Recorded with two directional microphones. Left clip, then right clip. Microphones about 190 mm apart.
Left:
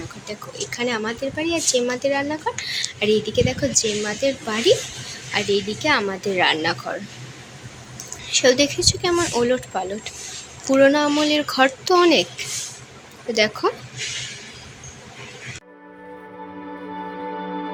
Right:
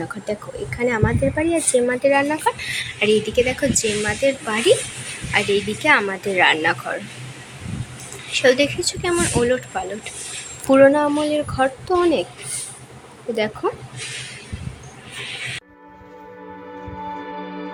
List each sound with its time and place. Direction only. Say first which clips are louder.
0.3 s speech: right 7 dB; 20° right (ahead or behind)
0.7 s speech: right 4 dB; 10° right (ahead or behind)
8.4 s speech: right 1 dB; 10° left (ahead or behind)
13.3 s speech: left 3 dB; 5° left (ahead or behind)